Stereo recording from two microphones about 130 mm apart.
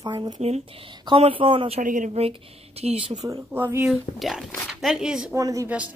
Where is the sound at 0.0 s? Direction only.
35° right (ahead or behind).